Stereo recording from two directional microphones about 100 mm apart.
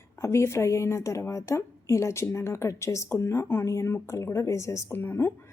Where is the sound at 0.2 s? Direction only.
25° left (ahead or behind).